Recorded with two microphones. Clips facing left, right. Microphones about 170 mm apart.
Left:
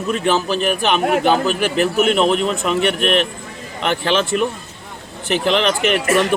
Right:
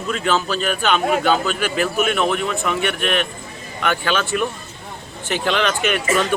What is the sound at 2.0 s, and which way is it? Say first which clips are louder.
Speech: left 4 dB; 25° left (ahead or behind).